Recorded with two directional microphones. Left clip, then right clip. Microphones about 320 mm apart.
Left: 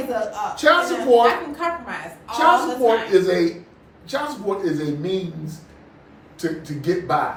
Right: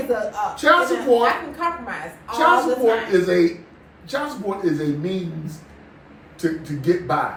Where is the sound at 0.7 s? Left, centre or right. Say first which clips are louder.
Even; centre.